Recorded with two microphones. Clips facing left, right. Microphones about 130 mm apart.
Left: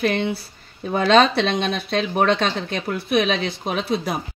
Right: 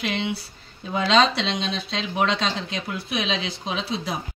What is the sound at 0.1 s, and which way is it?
Speech, 50° left (ahead or behind).